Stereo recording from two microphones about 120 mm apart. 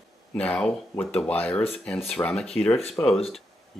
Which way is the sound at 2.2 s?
30° left (ahead or behind).